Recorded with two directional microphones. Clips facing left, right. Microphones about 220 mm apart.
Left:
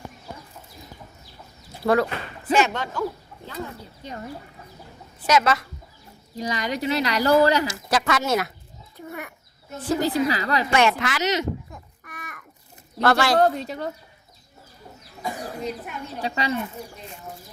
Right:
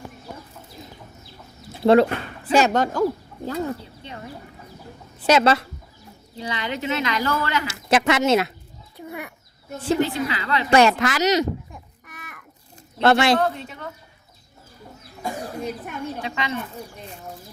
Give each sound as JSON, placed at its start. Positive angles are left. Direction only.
{"t": 1.8, "sound": "speech", "side_deg": -25}
{"t": 2.5, "sound": "speech", "side_deg": -40}
{"t": 5.2, "sound": "speech", "side_deg": -30}
{"t": 6.3, "sound": "speech", "side_deg": 40}
{"t": 7.9, "sound": "speech", "side_deg": -25}
{"t": 9.0, "sound": "bird", "side_deg": -10}
{"t": 10.0, "sound": "speech", "side_deg": 35}
{"t": 10.7, "sound": "speech", "side_deg": -35}
{"t": 11.7, "sound": "a sound", "side_deg": -5}
{"t": 13.0, "sound": "speech", "side_deg": -25}
{"t": 13.4, "sound": "speech", "side_deg": 35}
{"t": 16.2, "sound": "speech", "side_deg": 35}